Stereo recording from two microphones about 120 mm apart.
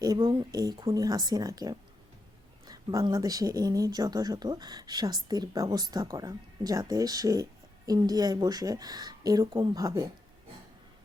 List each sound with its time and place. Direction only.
0.2 s speech: 40° right (ahead or behind)